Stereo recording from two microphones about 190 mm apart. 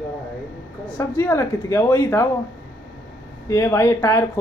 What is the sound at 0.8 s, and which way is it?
Speech, 10° left (ahead or behind).